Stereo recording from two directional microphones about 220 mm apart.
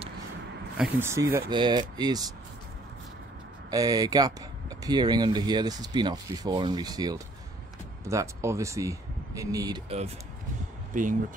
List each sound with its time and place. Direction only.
0.7 s speech: 5° right (ahead or behind)
3.7 s speech: 15° right (ahead or behind)
10.9 s speech: 35° right (ahead or behind)